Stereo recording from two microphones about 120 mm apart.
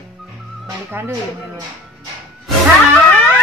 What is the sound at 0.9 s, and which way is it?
Speech, 20° right (ahead or behind).